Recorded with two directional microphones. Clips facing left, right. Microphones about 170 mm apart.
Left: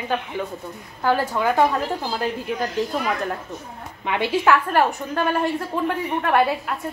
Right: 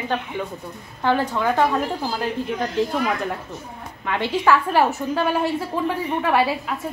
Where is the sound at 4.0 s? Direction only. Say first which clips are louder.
Left 1 dB; 15° left (ahead or behind).